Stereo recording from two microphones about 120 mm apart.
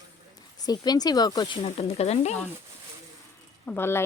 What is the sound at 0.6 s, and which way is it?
Speech, 35° left (ahead or behind).